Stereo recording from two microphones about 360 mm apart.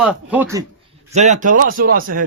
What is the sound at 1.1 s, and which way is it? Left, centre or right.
Speech, centre.